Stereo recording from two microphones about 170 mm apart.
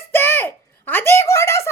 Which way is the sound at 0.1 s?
15° left (ahead or behind).